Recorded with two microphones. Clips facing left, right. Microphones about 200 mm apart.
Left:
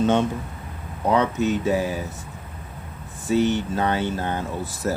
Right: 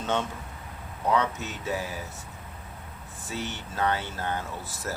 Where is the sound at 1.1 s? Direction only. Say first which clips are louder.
Left 8 dB; 20° left (ahead or behind).